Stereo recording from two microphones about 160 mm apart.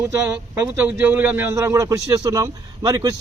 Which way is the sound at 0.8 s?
10° right (ahead or behind).